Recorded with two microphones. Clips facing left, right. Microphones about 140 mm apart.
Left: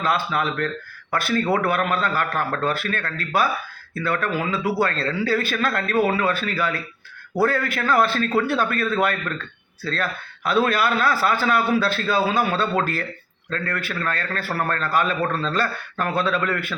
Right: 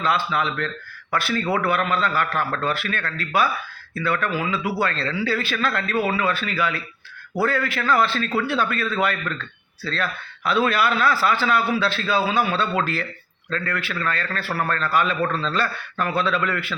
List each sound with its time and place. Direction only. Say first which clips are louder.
0.0 s a man's voice: even; 45° left (ahead or behind)